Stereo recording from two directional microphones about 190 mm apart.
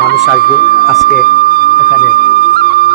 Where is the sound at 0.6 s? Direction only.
50° left (ahead or behind).